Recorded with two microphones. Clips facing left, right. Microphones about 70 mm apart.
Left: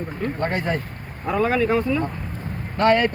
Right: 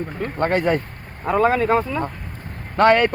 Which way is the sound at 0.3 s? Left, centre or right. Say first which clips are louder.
Right 7 dB; right.